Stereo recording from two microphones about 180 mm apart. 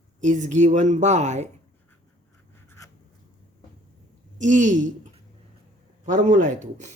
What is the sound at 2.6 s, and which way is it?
Writing, 15° left (ahead or behind).